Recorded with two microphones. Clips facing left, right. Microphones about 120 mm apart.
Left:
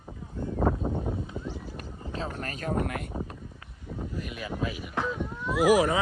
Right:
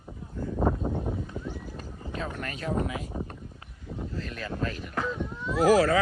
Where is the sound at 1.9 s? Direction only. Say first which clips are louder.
Even; 30° left (ahead or behind); by 3.1 s 60° left (ahead or behind).